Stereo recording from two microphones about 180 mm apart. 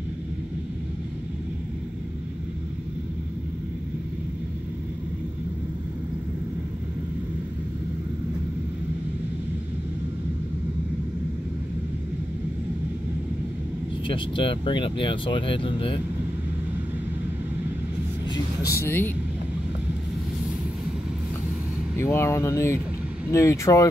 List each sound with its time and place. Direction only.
14.0 s speech: 30° left (ahead or behind)
18.3 s vehicle: 20° left (ahead or behind)
21.9 s speech: 15° left (ahead or behind)